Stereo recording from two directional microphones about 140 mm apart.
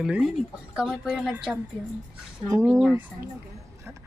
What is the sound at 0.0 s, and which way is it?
A woman's voice, 5° right (ahead or behind).